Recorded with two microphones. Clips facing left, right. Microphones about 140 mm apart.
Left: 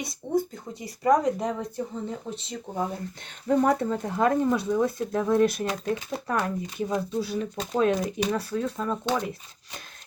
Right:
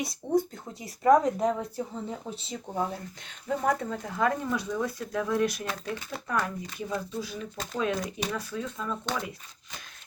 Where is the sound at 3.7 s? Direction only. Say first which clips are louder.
Left 4 dB; 30° left (ahead or behind).